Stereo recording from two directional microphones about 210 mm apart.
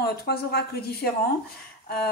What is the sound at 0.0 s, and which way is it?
Speech, 50° left (ahead or behind).